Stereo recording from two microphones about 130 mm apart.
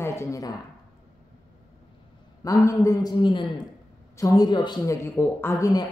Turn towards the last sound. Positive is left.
turn(degrees=30)  # may be behind; listen again after turning